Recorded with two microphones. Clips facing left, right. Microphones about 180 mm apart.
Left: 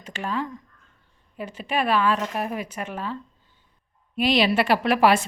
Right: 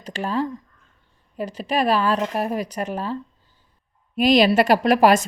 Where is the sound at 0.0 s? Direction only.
35° right (ahead or behind).